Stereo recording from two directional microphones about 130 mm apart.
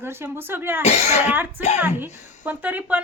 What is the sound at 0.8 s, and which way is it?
Speech, 55° left (ahead or behind).